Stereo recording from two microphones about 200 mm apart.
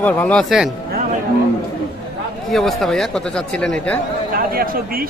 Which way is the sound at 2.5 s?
Centre (ahead or behind).